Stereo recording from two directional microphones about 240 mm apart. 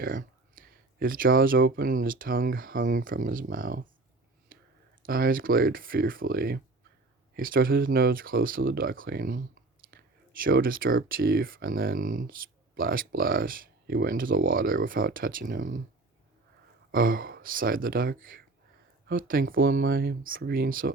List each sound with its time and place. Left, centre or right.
0.0 s speech: right
5.0 s speech: right
16.9 s speech: right